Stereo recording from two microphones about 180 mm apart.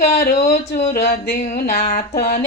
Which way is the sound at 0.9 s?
55° left (ahead or behind).